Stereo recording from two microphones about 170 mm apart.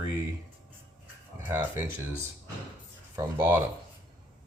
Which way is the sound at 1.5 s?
10° right (ahead or behind).